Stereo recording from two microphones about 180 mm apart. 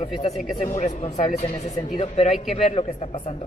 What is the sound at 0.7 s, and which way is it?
Speech, 40° left (ahead or behind).